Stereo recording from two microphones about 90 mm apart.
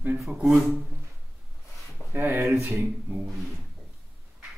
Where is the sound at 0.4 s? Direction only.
15° right (ahead or behind).